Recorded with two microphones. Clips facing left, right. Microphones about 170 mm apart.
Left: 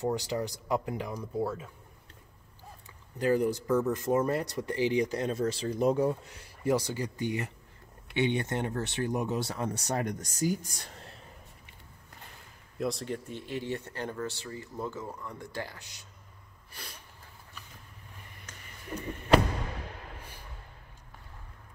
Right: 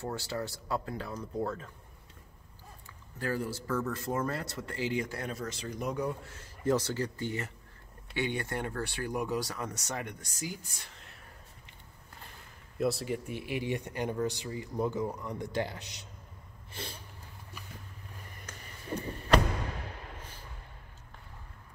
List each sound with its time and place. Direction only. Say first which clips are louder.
0.0 s speech: left 5 dB; 15° left (ahead or behind)
3.2 s speech: left 8 dB; 20° left (ahead or behind)
6.2 s speech: even; 15° left (ahead or behind); by 11.1 s 35° left (ahead or behind)
12.7 s speech: right 2 dB; 5° right (ahead or behind); by 16.1 s 20° right (ahead or behind)
16.7 s a sound: right 6 dB; 25° right (ahead or behind)
18.9 s a sound: right 2 dB; 30° right (ahead or behind)